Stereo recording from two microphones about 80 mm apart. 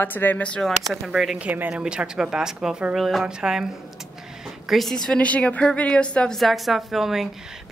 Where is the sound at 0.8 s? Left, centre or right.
Centre.